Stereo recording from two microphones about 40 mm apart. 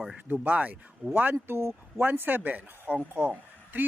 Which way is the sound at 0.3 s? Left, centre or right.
Right.